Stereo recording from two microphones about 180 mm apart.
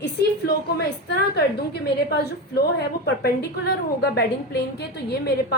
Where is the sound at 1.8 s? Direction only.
60° left (ahead or behind).